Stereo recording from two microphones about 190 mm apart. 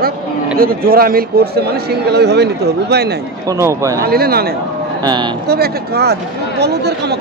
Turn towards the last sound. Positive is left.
turn(degrees=-60)  # may be behind; listen again after turning